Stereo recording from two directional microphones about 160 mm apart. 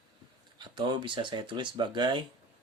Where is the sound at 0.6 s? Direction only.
30° right (ahead or behind).